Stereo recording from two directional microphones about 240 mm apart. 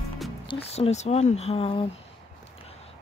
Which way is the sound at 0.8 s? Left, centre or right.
Left.